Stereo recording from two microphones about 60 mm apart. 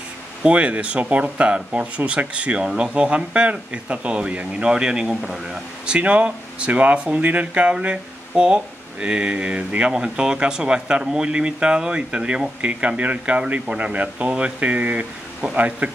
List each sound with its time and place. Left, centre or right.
0.4 s speech: right
5.9 s speech: centre